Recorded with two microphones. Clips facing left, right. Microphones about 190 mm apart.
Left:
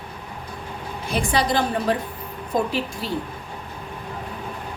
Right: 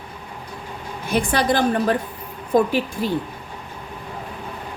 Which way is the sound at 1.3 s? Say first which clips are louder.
Right 1 dB; 55° right (ahead or behind).